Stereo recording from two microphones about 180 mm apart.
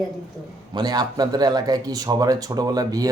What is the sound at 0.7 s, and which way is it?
Speech, 25° right (ahead or behind).